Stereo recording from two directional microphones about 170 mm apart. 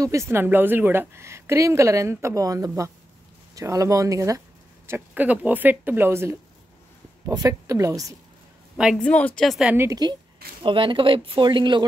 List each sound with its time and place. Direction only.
0.0 s a woman's voice: 15° right (ahead or behind)
8.7 s a woman's voice: centre (ahead or behind)
9.8 s speech: 25° right (ahead or behind)